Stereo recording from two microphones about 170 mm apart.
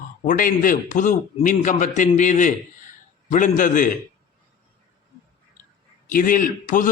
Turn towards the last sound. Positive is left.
turn(degrees=50)  # may be behind; listen again after turning